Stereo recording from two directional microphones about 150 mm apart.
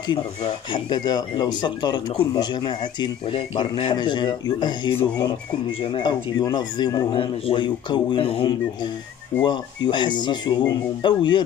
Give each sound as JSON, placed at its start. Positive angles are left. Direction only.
{"t": 0.7, "sound": "speech", "side_deg": 30}